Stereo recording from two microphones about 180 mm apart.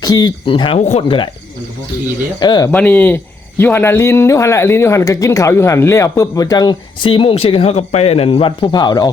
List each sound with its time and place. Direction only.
0.0 s speech: 20° left (ahead or behind)
2.4 s speech: 25° left (ahead or behind)
2.7 s speech: 10° left (ahead or behind)